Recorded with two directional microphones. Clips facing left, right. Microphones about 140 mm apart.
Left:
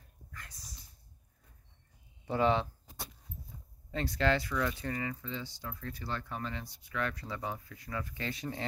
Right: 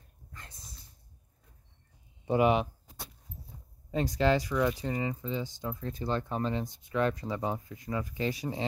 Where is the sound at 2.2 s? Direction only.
15° right (ahead or behind).